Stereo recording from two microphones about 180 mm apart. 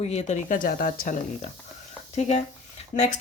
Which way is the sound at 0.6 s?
55° left (ahead or behind).